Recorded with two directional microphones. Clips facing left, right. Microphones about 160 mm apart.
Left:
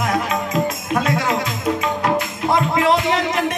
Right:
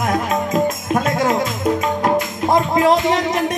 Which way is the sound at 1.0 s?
45° right (ahead or behind).